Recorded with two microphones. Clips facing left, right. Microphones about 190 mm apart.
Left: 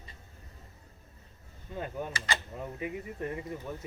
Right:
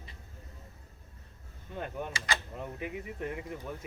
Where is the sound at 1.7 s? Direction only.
5° left (ahead or behind).